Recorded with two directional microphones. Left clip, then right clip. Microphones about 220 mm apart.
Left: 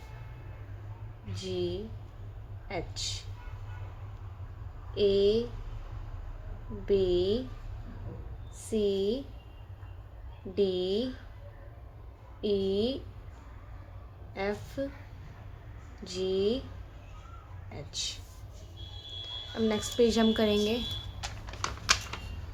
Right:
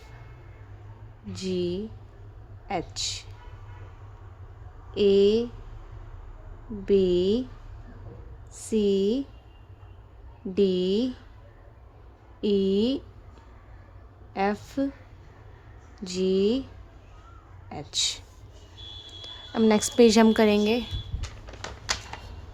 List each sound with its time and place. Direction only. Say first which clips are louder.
1.4 s a woman's voice: right 5 dB; 35° right (ahead or behind)
4.9 s a woman's voice: right 5 dB; 35° right (ahead or behind)
6.8 s a woman's voice: right 5 dB; 35° right (ahead or behind)
8.6 s a woman's voice: right 5 dB; 35° right (ahead or behind)
10.5 s a woman's voice: right 5 dB; 35° right (ahead or behind)
12.4 s a woman's voice: right 5 dB; 35° right (ahead or behind)
14.3 s a woman's voice: right 7 dB; 35° right (ahead or behind)
16.0 s a woman's voice: right 5 dB; 35° right (ahead or behind)
17.7 s a woman's voice: right 9 dB; 40° right (ahead or behind)
19.5 s a woman's voice: right 7 dB; 45° right (ahead or behind)